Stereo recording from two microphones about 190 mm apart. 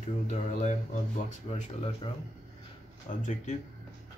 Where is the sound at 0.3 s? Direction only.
40° left (ahead or behind).